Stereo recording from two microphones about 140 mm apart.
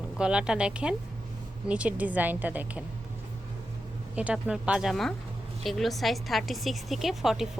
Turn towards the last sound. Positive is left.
turn(degrees=-5)  # may be behind; listen again after turning